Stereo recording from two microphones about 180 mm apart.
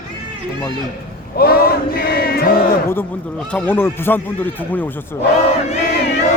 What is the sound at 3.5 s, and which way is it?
Speech, 10° left (ahead or behind).